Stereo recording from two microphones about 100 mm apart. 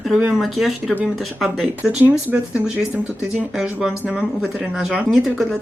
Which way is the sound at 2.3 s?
15° right (ahead or behind).